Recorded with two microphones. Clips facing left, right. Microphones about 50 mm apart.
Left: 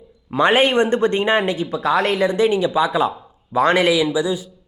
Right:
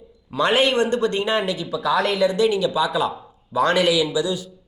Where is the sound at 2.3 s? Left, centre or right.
Left.